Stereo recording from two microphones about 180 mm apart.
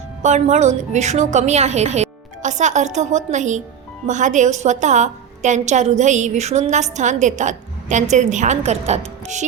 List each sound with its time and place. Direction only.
0.2 s a woman's voice: 40° right (ahead or behind)